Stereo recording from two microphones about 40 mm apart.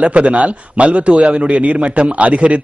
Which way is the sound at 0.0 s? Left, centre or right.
Right.